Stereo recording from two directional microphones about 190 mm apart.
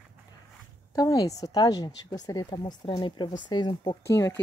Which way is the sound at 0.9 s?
20° left (ahead or behind).